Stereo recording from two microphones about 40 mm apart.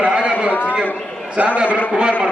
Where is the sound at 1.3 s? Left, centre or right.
Right.